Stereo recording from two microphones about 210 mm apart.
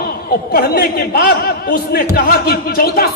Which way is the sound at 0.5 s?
45° left (ahead or behind).